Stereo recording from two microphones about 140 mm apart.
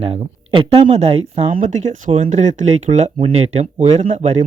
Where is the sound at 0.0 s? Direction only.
45° right (ahead or behind).